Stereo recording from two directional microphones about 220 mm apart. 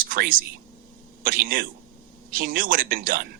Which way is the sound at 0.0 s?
40° right (ahead or behind).